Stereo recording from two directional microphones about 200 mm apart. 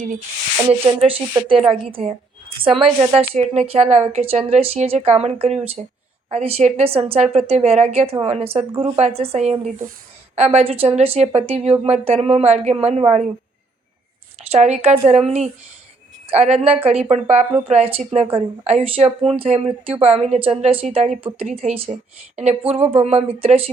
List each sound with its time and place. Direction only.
0.7 s a woman's voice: 25° right (ahead or behind)
14.5 s a woman's voice: 35° right (ahead or behind)